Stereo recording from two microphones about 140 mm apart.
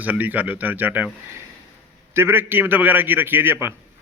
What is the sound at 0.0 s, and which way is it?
Speech, 10° right (ahead or behind).